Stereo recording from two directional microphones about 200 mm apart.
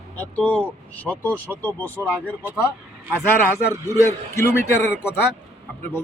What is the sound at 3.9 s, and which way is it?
Speech, 15° left (ahead or behind).